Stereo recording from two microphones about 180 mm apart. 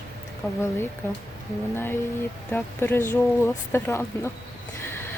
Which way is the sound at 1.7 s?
10° left (ahead or behind).